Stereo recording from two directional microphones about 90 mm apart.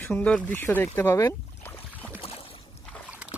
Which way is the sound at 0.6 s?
25° left (ahead or behind).